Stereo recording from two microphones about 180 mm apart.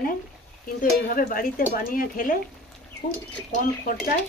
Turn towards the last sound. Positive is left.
turn(degrees=50)  # may be behind; listen again after turning